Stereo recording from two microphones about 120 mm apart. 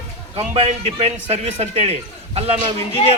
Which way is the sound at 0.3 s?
55° right (ahead or behind).